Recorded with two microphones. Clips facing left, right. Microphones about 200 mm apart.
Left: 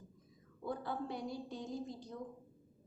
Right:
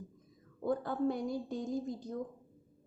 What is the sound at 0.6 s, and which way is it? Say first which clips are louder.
A woman's voice: right 8 dB; 50° right (ahead or behind).